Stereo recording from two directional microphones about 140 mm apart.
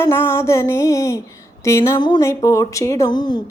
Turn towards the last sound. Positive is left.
turn(degrees=30)  # may be behind; listen again after turning